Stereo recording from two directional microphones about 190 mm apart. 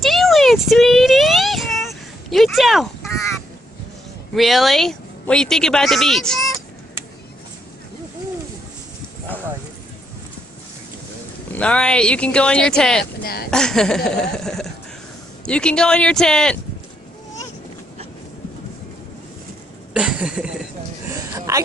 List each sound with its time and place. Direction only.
0.0 s child singing: centre (ahead or behind)
4.3 s speech: centre (ahead or behind)
11.5 s speech: 5° left (ahead or behind)
13.0 s speech: 55° left (ahead or behind)
13.5 s speech: 5° left (ahead or behind)
19.9 s speech: 5° right (ahead or behind)
21.3 s a sound: 15° right (ahead or behind)